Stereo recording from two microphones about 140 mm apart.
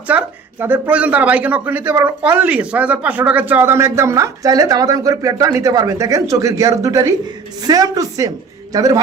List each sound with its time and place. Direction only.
0.1 s a man's voice: 10° right (ahead or behind)